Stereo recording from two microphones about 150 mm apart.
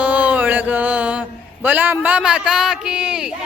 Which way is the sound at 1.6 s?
10° right (ahead or behind).